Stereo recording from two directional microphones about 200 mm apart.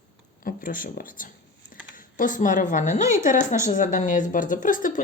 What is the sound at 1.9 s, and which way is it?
Speech, 45° left (ahead or behind).